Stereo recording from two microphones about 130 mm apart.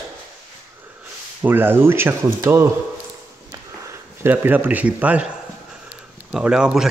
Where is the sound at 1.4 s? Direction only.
15° right (ahead or behind).